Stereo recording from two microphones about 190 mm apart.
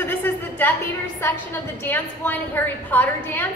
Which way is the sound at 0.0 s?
10° left (ahead or behind).